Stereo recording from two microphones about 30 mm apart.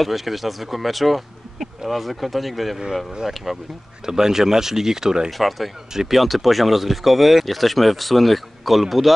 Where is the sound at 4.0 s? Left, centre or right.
Centre.